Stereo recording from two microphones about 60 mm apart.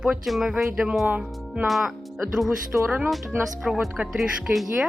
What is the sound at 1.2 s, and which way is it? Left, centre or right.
Speech, centre.